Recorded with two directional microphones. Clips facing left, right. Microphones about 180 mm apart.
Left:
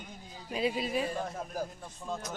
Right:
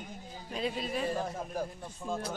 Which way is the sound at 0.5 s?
5° left (ahead or behind).